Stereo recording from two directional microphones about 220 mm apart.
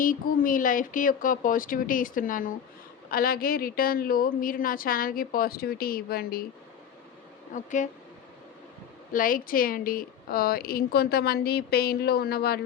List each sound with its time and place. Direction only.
0.0 s a woman's voice: 40° left (ahead or behind)
7.5 s a woman's voice: 35° left (ahead or behind)
9.1 s a woman's voice: 40° left (ahead or behind)